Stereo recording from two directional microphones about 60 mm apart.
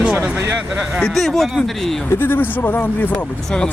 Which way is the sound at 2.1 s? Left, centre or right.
Left.